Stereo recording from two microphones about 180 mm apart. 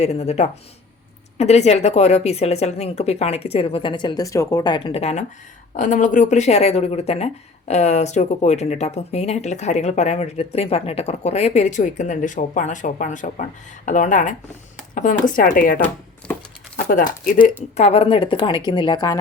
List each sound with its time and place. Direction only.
0.0 s speech: 35° left (ahead or behind)
16.9 s speech: 50° left (ahead or behind); by 19.2 s 25° left (ahead or behind)